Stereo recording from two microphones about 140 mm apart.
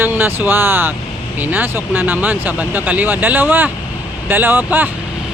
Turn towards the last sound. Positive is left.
turn(degrees=-15)  # may be behind; listen again after turning